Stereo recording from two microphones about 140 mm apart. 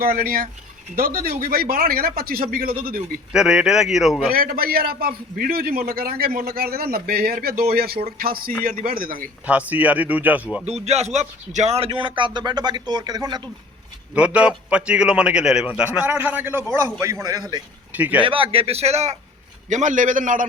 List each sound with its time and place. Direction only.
0.0 s a man's voice: 90° right
3.3 s speech: 5° right (ahead or behind)
4.3 s a man's voice: 90° right
9.5 s a man's voice: 10° right (ahead or behind)
10.8 s speech: 50° right (ahead or behind); by 13.4 s 30° right (ahead or behind)
14.1 s a man's voice: 10° right (ahead or behind); by 17.6 s 25° right (ahead or behind)
17.9 s speech: 10° right (ahead or behind)
18.2 s speech: 40° right (ahead or behind)
19.7 s a man's voice: 65° right (ahead or behind)